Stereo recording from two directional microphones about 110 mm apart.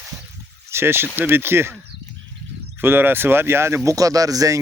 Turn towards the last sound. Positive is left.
turn(degrees=-30)  # may be behind; listen again after turning